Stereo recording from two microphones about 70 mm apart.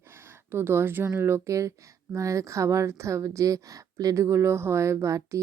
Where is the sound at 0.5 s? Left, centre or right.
Right.